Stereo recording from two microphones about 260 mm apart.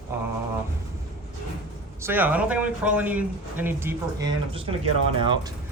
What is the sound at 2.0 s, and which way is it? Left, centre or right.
Speech, centre.